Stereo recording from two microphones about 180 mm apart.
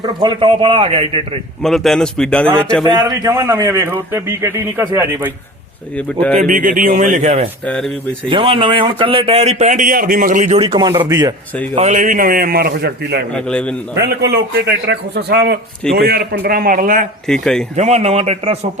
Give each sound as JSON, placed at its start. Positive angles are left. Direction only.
{"t": 0.0, "sound": "a man's voice", "side_deg": -25}
{"t": 1.6, "sound": "speech", "side_deg": 0}
{"t": 2.8, "sound": "a man's voice", "side_deg": -20}
{"t": 6.0, "sound": "speech", "side_deg": 5}
{"t": 6.4, "sound": "speech", "side_deg": -50}
{"t": 7.6, "sound": "speech", "side_deg": 5}
{"t": 8.3, "sound": "a man's voice", "side_deg": -30}
{"t": 11.8, "sound": "a man's voice", "side_deg": -45}
{"t": 13.3, "sound": "speech", "side_deg": 5}
{"t": 14.0, "sound": "a man's voice", "side_deg": -70}
{"t": 17.2, "sound": "speech", "side_deg": 5}
{"t": 17.7, "sound": "a man's voice", "side_deg": -35}